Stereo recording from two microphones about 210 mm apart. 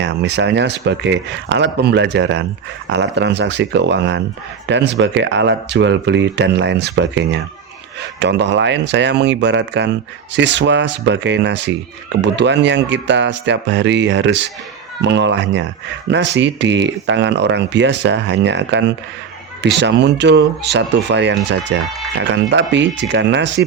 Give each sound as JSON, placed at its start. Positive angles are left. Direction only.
{"t": 0.0, "sound": "speech", "side_deg": -55}